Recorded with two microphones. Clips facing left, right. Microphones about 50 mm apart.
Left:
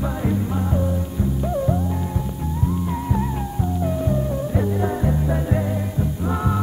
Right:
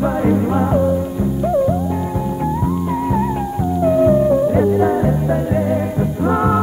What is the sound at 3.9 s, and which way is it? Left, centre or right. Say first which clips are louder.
Music: right 15 dB; right.